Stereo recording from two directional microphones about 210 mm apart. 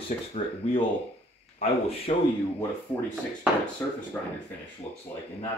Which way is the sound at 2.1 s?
30° left (ahead or behind).